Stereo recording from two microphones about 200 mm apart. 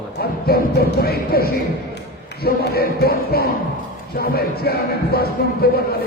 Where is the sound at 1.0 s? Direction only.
50° left (ahead or behind).